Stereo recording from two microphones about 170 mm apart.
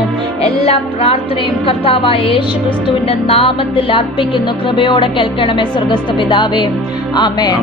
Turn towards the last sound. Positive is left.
turn(degrees=25)  # may be behind; listen again after turning